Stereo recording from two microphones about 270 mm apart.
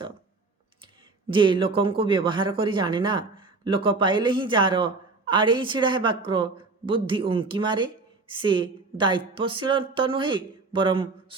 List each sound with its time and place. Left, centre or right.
1.3 s speech: centre